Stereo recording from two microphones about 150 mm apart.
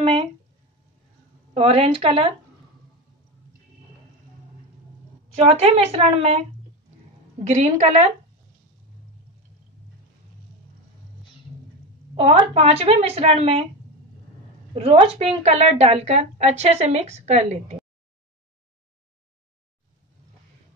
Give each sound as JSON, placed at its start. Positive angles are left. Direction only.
{"t": 0.0, "sound": "speech", "side_deg": -40}
{"t": 1.5, "sound": "a woman's voice", "side_deg": -40}
{"t": 5.3, "sound": "a woman's voice", "side_deg": -45}
{"t": 7.4, "sound": "a woman's voice", "side_deg": -50}
{"t": 12.2, "sound": "a woman's voice", "side_deg": -40}
{"t": 14.7, "sound": "a woman's voice", "side_deg": -40}